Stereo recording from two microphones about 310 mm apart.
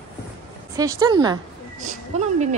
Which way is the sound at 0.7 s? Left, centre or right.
Centre.